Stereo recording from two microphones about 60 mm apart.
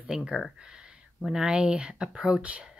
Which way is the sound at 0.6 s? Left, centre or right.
Centre.